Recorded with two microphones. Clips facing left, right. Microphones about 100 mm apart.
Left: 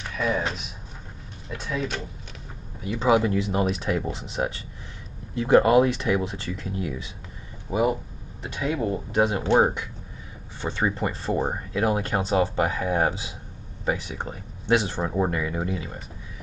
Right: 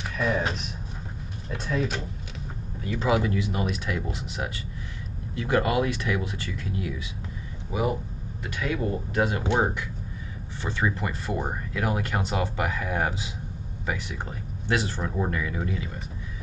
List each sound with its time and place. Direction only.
0.0 s speech: centre (ahead or behind)
2.8 s speech: 20° left (ahead or behind)
8.5 s speech: 20° left (ahead or behind)
10.6 s speech: 25° left (ahead or behind)